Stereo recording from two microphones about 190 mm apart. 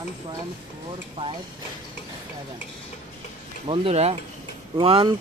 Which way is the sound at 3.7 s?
30° right (ahead or behind).